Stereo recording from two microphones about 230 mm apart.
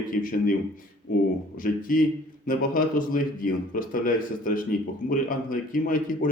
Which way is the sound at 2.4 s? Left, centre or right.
Left.